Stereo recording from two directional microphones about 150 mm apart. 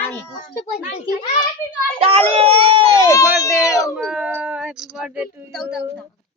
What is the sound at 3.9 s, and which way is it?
Speech, 5° right (ahead or behind).